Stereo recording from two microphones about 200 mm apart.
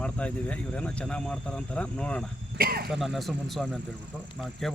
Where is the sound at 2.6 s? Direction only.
50° right (ahead or behind).